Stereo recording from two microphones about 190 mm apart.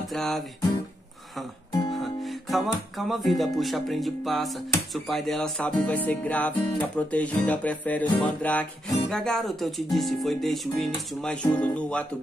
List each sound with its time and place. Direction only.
0.1 s music: centre (ahead or behind)
1.7 s music: 20° left (ahead or behind)
2.5 s music: centre (ahead or behind)
4.9 s speech: centre (ahead or behind)
9.1 s music: 5° left (ahead or behind)